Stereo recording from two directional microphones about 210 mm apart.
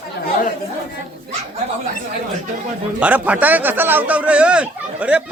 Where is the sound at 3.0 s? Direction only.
5° right (ahead or behind).